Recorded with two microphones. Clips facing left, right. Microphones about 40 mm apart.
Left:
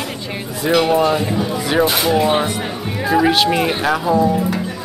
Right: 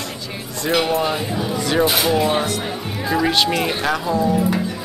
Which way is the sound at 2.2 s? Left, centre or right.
Left.